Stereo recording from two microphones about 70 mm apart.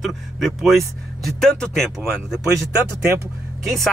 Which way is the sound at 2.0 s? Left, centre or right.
Centre.